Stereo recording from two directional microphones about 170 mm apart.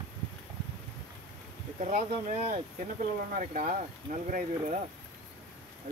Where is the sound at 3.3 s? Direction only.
55° right (ahead or behind).